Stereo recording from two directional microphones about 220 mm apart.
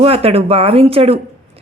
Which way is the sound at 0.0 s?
25° right (ahead or behind).